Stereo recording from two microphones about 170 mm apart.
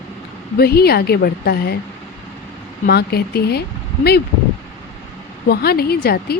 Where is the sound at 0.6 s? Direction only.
65° left (ahead or behind).